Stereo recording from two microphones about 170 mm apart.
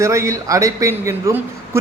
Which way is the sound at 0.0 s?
15° right (ahead or behind).